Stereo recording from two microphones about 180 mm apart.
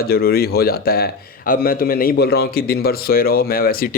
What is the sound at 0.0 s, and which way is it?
Speech, 55° left (ahead or behind).